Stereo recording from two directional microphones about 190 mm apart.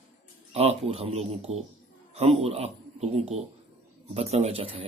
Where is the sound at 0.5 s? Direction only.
30° right (ahead or behind).